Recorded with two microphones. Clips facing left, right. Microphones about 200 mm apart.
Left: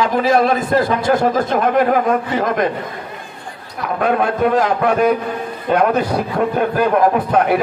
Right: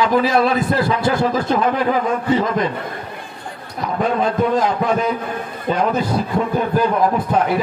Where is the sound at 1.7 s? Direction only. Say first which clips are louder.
Left 4 dB; 55° left (ahead or behind).